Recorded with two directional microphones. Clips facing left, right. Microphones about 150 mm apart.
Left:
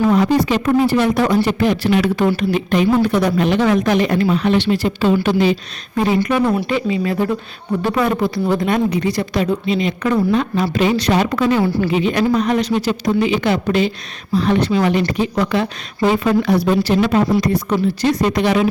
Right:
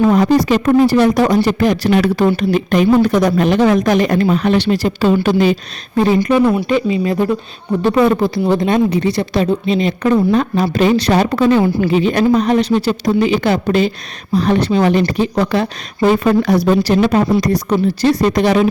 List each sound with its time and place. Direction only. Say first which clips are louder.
0.1 s speech: right 3 dB; 40° right (ahead or behind)
6.4 s speech: right 3 dB; 5° right (ahead or behind)
6.7 s speech: right 3 dB; 20° right (ahead or behind)
16.0 s speech: right 3 dB; 45° right (ahead or behind)